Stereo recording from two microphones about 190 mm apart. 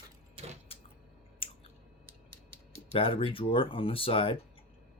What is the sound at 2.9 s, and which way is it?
Speech, 30° left (ahead or behind).